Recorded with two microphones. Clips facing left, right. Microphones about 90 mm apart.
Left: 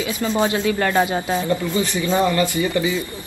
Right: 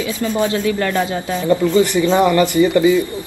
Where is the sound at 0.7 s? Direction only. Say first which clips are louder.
Even; 35° left (ahead or behind).